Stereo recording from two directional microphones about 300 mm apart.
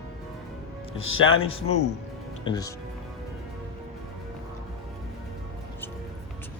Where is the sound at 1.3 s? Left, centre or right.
Centre.